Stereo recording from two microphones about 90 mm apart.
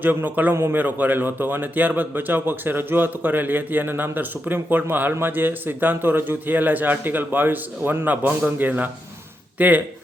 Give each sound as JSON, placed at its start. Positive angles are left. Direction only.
{"t": 0.0, "sound": "speech", "side_deg": -20}